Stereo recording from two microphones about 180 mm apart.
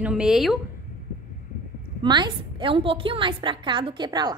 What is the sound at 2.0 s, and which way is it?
A woman's voice, 25° right (ahead or behind).